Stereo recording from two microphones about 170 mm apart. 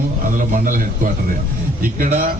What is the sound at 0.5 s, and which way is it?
Speech, 55° right (ahead or behind).